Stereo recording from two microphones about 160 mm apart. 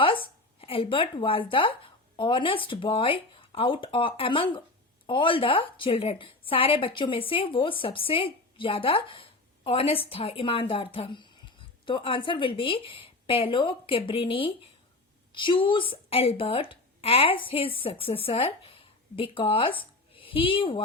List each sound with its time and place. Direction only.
0.0 s a woman's voice: 35° left (ahead or behind)